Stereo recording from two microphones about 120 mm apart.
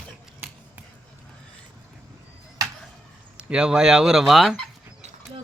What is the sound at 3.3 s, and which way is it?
Speech, 10° right (ahead or behind).